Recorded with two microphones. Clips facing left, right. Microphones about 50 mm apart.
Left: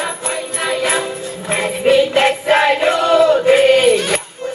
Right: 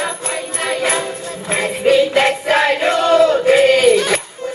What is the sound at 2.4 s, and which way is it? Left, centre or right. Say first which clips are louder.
Choir: left 2 dB; left.